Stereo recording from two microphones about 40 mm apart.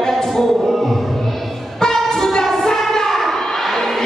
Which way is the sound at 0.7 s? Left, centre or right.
Centre.